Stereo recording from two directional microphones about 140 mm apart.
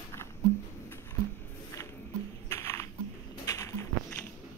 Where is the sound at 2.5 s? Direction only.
20° left (ahead or behind).